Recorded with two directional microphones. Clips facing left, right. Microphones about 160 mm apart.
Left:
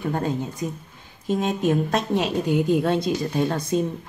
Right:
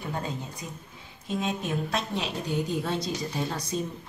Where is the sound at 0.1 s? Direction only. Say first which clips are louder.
Left 7 dB; 55° left (ahead or behind).